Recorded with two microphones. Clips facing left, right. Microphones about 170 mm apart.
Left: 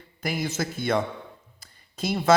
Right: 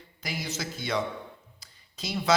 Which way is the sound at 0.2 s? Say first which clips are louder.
Left 7 dB; 55° left (ahead or behind).